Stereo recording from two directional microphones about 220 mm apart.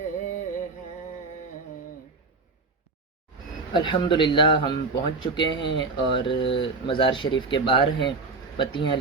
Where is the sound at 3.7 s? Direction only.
20° left (ahead or behind).